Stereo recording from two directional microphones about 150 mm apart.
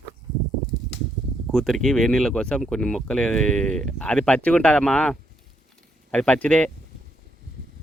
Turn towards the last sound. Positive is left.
turn(degrees=5)  # may be behind; listen again after turning